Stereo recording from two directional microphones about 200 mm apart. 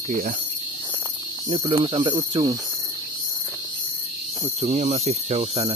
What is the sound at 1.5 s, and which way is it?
Cricket, 25° right (ahead or behind).